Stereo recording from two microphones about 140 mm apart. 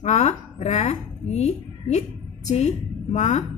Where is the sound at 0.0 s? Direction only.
55° left (ahead or behind).